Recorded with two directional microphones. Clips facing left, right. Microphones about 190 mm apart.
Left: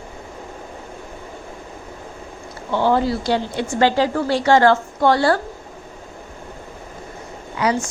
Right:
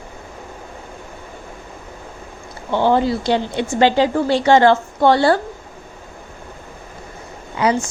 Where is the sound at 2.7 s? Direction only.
20° right (ahead or behind).